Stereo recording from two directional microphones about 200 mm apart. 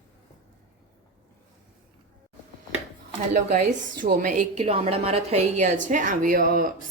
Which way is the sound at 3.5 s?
40° right (ahead or behind).